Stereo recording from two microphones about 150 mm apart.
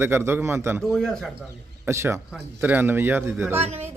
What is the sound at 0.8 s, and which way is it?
Speech, centre (ahead or behind).